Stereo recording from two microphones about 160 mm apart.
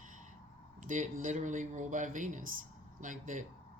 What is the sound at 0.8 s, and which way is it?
Speech, 55° right (ahead or behind).